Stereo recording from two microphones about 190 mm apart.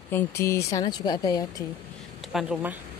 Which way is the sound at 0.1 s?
15° left (ahead or behind).